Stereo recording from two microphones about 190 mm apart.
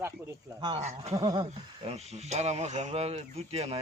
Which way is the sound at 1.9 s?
35° right (ahead or behind).